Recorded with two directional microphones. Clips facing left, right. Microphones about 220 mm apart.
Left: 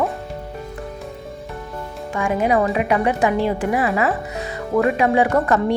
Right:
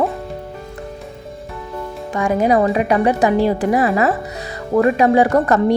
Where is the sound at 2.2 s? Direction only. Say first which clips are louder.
Right 3 dB; 35° right (ahead or behind).